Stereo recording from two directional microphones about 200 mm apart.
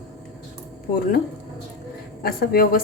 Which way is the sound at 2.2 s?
50° left (ahead or behind).